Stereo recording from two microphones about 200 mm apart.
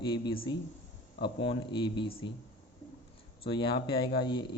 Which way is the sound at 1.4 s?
25° left (ahead or behind).